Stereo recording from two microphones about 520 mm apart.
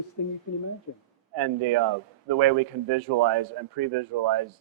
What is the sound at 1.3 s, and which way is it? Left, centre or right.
Speech, right.